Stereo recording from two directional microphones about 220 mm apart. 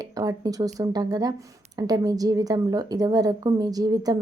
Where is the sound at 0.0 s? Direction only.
15° right (ahead or behind).